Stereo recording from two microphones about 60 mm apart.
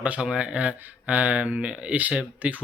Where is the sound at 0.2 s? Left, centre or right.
Centre.